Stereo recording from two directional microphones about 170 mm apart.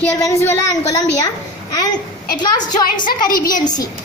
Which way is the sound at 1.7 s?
20° left (ahead or behind).